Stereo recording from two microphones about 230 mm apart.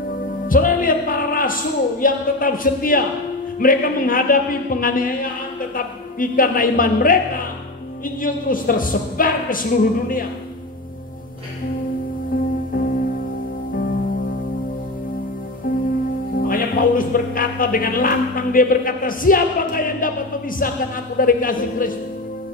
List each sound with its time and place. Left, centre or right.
0.5 s a woman's voice: left
12.7 s music: left
16.3 s speech: left